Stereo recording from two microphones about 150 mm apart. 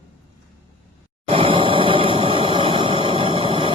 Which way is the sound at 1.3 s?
40° right (ahead or behind).